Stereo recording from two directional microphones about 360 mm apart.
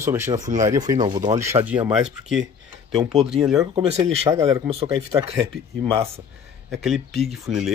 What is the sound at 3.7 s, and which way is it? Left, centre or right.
Speech, centre.